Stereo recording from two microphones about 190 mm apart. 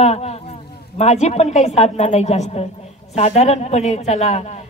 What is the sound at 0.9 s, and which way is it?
A woman's voice, 35° left (ahead or behind).